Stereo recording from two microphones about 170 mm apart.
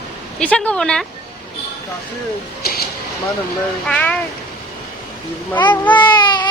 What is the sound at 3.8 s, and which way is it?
Speech, 10° left (ahead or behind).